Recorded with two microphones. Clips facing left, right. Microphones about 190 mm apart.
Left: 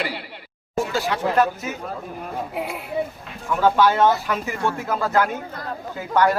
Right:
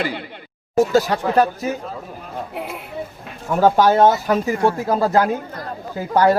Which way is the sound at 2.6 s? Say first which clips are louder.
Left 1 dB; centre (ahead or behind).